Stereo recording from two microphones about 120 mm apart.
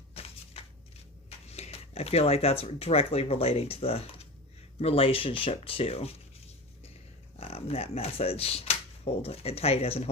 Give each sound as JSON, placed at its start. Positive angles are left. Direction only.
{"t": 0.1, "sound": "a sound", "side_deg": 55}
{"t": 1.5, "sound": "speech", "side_deg": 60}
{"t": 7.3, "sound": "speech", "side_deg": 55}